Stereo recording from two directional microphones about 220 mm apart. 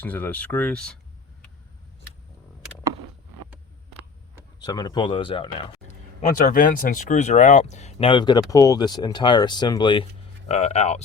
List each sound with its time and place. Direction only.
0.0 s speech: 5° left (ahead or behind)
4.6 s speech: 20° left (ahead or behind)
6.2 s speech: 40° left (ahead or behind)